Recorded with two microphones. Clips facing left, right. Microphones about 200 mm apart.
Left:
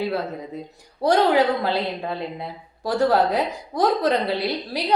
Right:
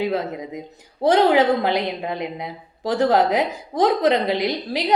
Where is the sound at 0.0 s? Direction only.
15° right (ahead or behind).